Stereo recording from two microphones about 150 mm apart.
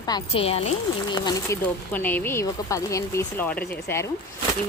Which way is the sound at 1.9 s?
10° left (ahead or behind).